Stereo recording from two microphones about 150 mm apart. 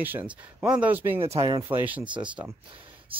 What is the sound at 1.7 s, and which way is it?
Speech, 10° right (ahead or behind).